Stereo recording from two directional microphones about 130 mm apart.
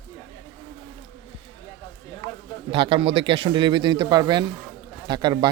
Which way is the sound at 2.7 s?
45° right (ahead or behind).